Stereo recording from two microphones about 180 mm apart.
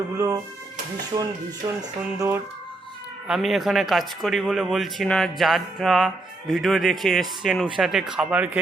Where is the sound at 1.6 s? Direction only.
25° right (ahead or behind).